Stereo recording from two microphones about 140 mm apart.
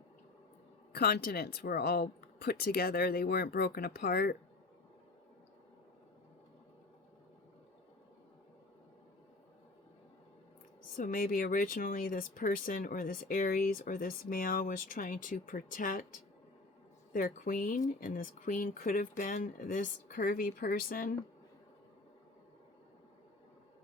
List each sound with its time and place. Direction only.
0.9 s speech: 90° left
10.9 s speech: 85° left
17.1 s speech: 80° left